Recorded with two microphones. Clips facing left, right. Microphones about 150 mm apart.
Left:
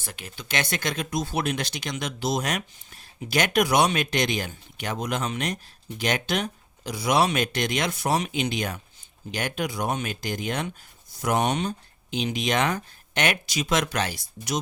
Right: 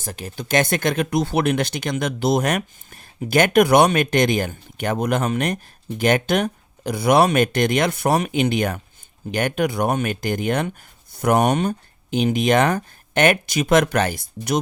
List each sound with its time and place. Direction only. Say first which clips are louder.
0.0 s speech: right 9 dB; 40° right (ahead or behind)